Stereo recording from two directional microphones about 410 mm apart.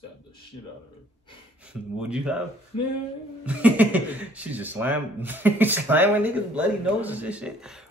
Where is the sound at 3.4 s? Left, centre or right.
Centre.